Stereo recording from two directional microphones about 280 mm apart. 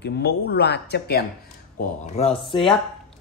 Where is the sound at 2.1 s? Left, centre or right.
Centre.